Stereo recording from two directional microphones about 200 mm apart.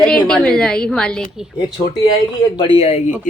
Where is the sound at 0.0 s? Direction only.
5° left (ahead or behind).